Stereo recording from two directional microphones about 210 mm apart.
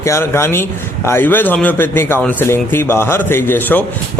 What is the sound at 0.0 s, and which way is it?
A man's voice, 15° left (ahead or behind).